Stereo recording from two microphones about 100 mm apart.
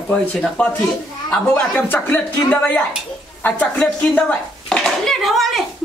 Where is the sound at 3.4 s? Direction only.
10° left (ahead or behind).